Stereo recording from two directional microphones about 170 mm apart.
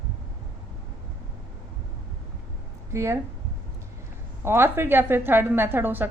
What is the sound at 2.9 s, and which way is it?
Speech, 15° right (ahead or behind).